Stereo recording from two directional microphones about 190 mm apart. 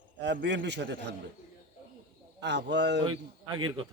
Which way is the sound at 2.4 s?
65° right (ahead or behind).